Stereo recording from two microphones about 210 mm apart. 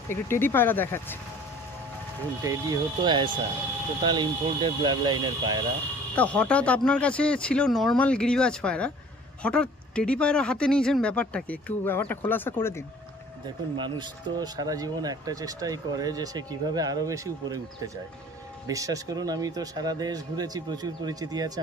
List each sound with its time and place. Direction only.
0.1 s speech: 10° left (ahead or behind)
2.4 s speech: 15° right (ahead or behind)
6.1 s speech: 5° left (ahead or behind)
13.7 s speech: 20° right (ahead or behind)